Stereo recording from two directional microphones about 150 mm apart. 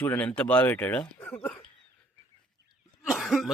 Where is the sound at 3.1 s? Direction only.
Centre (ahead or behind).